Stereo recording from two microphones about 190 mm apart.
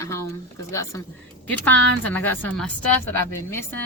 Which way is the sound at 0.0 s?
15° left (ahead or behind).